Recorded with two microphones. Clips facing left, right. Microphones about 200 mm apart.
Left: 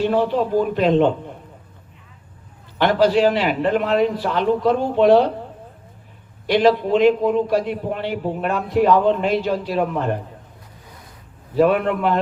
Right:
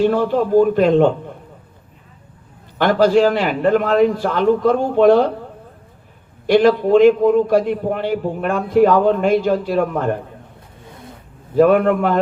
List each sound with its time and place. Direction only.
0.0 s a man's voice: 45° right (ahead or behind)
2.7 s a man's voice: 45° right (ahead or behind)
6.5 s a man's voice: 45° right (ahead or behind)
10.8 s vehicle: 25° right (ahead or behind)
11.5 s a man's voice: 45° right (ahead or behind)